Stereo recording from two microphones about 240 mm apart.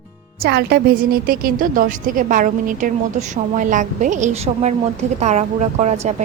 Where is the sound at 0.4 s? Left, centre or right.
Right.